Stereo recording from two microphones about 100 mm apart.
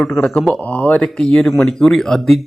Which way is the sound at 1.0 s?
5° left (ahead or behind).